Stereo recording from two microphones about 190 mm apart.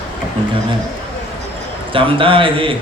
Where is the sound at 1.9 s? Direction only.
25° right (ahead or behind).